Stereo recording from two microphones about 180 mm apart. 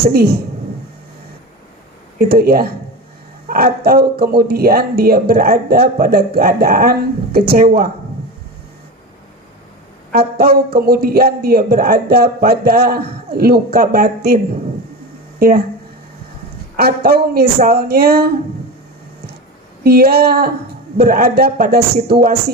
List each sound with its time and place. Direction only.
0.1 s a man's voice: 60° right (ahead or behind)
2.1 s a man's voice: 55° right (ahead or behind)
10.1 s a man's voice: 60° right (ahead or behind)
15.4 s speech: 55° right (ahead or behind)
16.7 s a man's voice: 60° right (ahead or behind)
19.8 s a man's voice: 60° right (ahead or behind)